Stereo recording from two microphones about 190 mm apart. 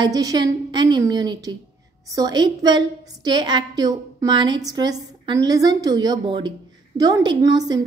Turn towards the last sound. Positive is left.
turn(degrees=-20)  # may be behind; listen again after turning